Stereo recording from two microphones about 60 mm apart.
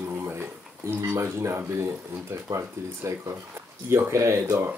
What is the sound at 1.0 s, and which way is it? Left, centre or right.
Speech, right.